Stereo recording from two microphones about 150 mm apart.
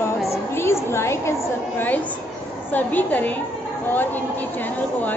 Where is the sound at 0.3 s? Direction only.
15° left (ahead or behind).